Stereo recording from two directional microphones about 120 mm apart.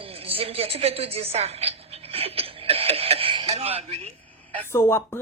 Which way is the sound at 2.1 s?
55° right (ahead or behind).